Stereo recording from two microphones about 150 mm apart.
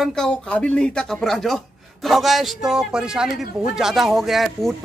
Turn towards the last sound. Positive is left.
turn(degrees=0)  # may be behind; listen again after turning